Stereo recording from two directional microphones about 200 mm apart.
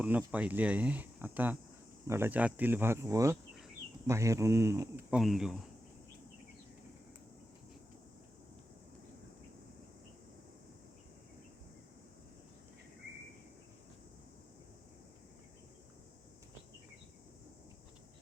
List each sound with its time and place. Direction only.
0.0 s speech: 5° right (ahead or behind)